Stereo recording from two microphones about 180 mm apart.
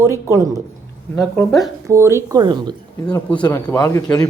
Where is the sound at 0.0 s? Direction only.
15° right (ahead or behind).